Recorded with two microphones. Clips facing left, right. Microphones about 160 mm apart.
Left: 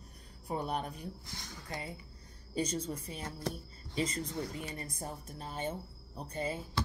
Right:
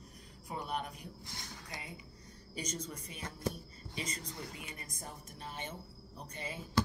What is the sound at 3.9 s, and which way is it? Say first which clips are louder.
A woman's voice: left 8 dB; 30° left (ahead or behind).